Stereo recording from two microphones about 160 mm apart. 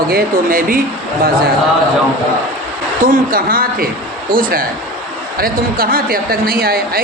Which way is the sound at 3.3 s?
65° right (ahead or behind).